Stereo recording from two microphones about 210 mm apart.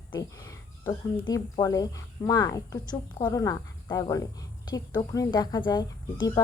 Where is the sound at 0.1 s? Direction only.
15° left (ahead or behind).